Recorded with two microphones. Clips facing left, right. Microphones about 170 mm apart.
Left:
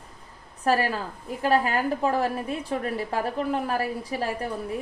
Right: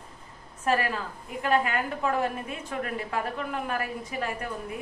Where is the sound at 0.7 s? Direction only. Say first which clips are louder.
Left 3 dB; 35° left (ahead or behind).